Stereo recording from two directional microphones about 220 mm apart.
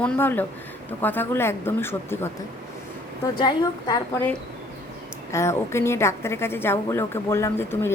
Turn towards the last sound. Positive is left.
turn(degrees=10)  # may be behind; listen again after turning